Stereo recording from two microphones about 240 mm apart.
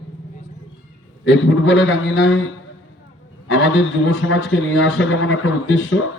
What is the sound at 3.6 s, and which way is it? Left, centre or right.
A man's voice, left.